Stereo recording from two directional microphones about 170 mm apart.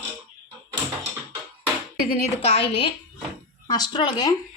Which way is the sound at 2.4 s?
35° left (ahead or behind).